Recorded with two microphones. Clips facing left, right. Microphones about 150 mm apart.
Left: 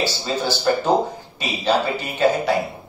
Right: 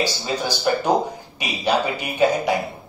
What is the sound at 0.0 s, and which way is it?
A man's voice, 15° right (ahead or behind).